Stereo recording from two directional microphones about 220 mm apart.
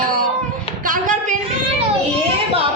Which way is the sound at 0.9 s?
35° right (ahead or behind).